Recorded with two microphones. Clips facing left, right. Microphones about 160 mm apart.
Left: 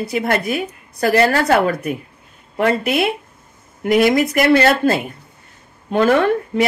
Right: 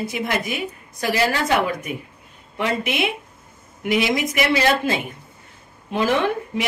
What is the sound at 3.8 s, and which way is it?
Speech, 50° left (ahead or behind).